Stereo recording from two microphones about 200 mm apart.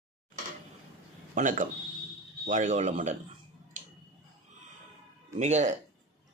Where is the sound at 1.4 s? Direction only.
40° right (ahead or behind).